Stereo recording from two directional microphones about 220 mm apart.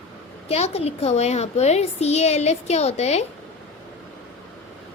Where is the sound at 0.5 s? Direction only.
30° left (ahead or behind).